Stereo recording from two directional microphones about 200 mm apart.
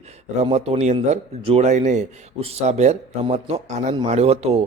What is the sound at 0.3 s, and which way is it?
A man's voice, 30° right (ahead or behind).